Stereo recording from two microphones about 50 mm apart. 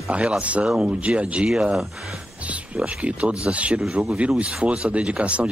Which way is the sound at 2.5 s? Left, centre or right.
Right.